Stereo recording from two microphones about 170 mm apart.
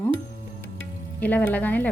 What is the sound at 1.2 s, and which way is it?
Speech, 10° left (ahead or behind).